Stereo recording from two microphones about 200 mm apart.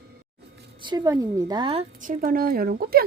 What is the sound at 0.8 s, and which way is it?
A woman's voice, 20° right (ahead or behind).